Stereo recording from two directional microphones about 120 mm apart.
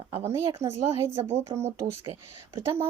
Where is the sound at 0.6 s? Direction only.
20° right (ahead or behind).